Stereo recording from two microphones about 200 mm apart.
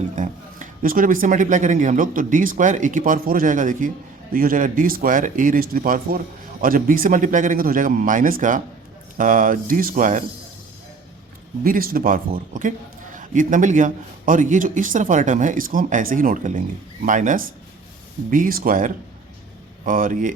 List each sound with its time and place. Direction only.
0.2 s speech: 40° right (ahead or behind)
11.6 s a man's voice: 45° right (ahead or behind)